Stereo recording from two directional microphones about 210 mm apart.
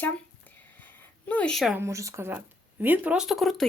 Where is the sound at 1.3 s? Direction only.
5° left (ahead or behind).